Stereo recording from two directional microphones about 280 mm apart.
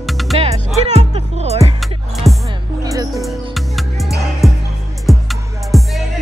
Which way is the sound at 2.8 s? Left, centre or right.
Centre.